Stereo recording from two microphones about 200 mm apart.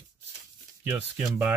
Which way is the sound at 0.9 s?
10° right (ahead or behind).